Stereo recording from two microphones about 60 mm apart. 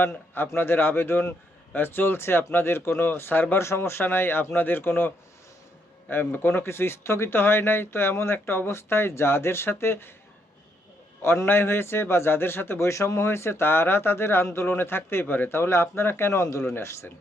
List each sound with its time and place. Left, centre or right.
0.3 s a man's voice: left
3.6 s a man's voice: left
11.2 s speech: left
12.9 s speech: left